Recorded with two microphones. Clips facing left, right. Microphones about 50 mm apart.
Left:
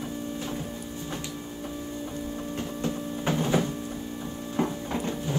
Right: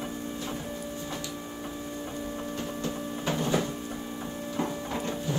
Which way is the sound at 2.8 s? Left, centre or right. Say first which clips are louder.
Left 2 dB; left.